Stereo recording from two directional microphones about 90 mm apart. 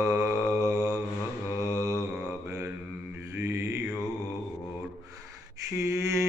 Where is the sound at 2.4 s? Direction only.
30° right (ahead or behind).